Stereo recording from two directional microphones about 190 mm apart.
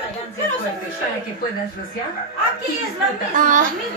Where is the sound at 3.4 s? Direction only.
45° right (ahead or behind).